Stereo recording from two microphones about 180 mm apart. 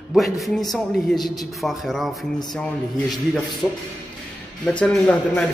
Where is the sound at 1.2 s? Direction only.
20° left (ahead or behind).